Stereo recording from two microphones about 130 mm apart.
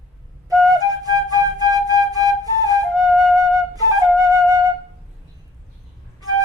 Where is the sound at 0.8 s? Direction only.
30° right (ahead or behind).